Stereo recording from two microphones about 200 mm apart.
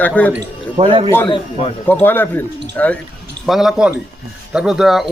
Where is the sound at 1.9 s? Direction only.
10° left (ahead or behind).